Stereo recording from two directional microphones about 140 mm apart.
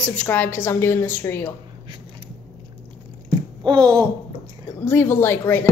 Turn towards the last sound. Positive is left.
turn(degrees=15)  # may be behind; listen again after turning